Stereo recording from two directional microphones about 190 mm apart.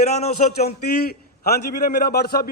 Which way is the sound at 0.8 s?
55° left (ahead or behind).